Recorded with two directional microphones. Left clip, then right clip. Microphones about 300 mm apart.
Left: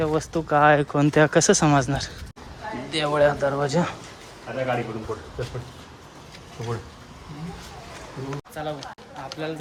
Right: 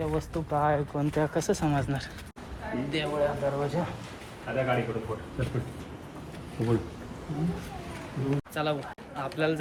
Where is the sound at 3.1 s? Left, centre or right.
Left.